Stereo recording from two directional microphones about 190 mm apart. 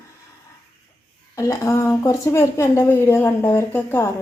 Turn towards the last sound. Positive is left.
turn(degrees=10)  # may be behind; listen again after turning